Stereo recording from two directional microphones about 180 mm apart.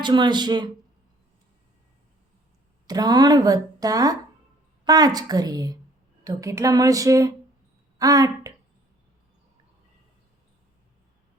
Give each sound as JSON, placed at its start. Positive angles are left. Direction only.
{"t": 0.0, "sound": "a woman's voice", "side_deg": -25}
{"t": 2.8, "sound": "a woman's voice", "side_deg": -20}